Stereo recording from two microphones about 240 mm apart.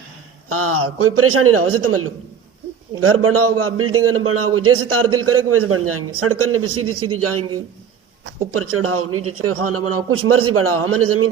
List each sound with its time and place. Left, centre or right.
0.4 s a man's voice: right
8.5 s a man's voice: right